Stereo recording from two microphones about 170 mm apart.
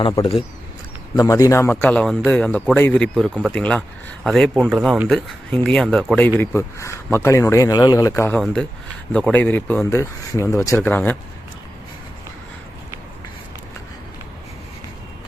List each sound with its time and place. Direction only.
0.0 s speech: 35° left (ahead or behind)
1.1 s speech: 20° left (ahead or behind)